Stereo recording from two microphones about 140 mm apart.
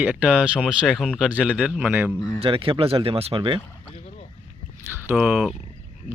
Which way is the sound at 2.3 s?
40° right (ahead or behind).